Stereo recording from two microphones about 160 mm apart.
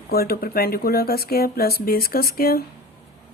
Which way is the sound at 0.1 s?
75° left (ahead or behind).